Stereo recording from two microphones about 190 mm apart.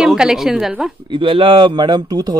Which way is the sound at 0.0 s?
5° right (ahead or behind).